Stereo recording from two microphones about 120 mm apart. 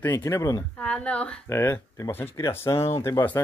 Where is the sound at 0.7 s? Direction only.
10° left (ahead or behind).